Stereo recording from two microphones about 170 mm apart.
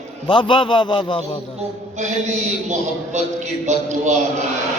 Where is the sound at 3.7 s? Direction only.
45° right (ahead or behind).